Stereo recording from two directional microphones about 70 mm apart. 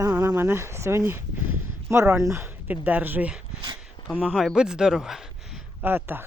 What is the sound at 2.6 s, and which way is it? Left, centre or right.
Speech, right.